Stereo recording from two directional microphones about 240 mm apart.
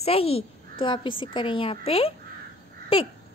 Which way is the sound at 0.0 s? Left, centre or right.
Left.